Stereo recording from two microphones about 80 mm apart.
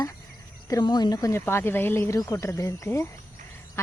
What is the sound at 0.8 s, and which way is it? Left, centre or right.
Speech, left.